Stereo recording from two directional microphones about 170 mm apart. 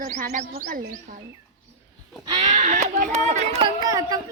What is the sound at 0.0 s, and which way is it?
Speech, 50° right (ahead or behind).